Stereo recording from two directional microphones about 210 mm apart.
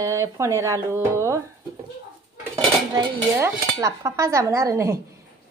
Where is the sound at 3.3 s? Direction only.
15° right (ahead or behind).